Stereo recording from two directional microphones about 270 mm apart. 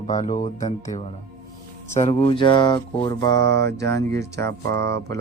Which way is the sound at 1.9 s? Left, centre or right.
Left.